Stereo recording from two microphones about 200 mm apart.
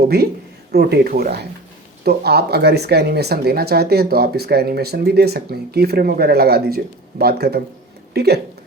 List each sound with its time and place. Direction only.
0.7 s speech: 50° right (ahead or behind)